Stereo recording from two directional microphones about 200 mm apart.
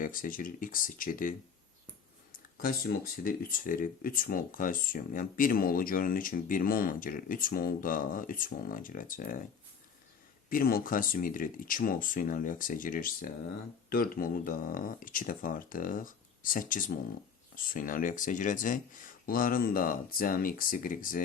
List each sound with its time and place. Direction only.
0.0 s speech: 45° left (ahead or behind)
2.6 s speech: 45° left (ahead or behind)
10.5 s speech: 45° left (ahead or behind)